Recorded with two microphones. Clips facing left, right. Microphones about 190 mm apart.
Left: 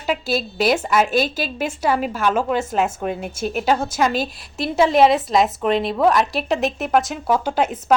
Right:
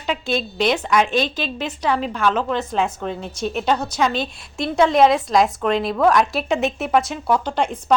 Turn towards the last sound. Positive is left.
turn(degrees=5)  # may be behind; listen again after turning